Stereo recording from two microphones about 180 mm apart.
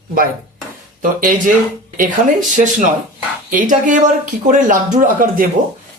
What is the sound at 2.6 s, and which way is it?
Speech, 45° right (ahead or behind).